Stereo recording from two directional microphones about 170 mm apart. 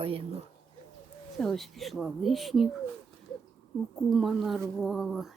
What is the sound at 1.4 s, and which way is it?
Speech, centre (ahead or behind).